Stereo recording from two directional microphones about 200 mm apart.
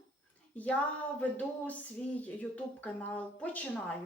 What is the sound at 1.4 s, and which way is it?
Speech, 10° left (ahead or behind).